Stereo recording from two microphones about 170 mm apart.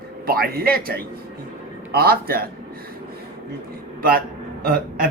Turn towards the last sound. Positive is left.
turn(degrees=-60)  # may be behind; listen again after turning